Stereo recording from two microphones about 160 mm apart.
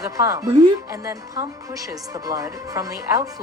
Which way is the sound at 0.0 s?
20° right (ahead or behind).